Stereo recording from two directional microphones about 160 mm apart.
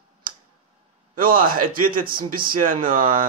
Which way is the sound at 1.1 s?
60° right (ahead or behind).